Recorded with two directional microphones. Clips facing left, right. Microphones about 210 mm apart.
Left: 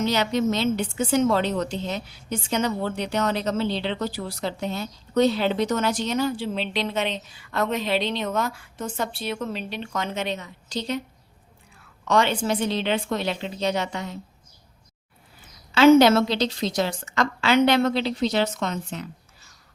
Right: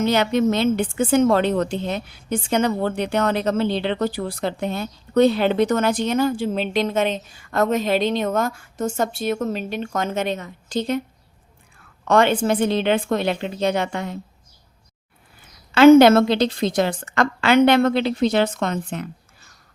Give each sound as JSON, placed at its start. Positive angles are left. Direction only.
{"t": 0.0, "sound": "a woman's voice", "side_deg": -55}
{"t": 12.0, "sound": "a woman's voice", "side_deg": -55}
{"t": 15.7, "sound": "a woman's voice", "side_deg": -55}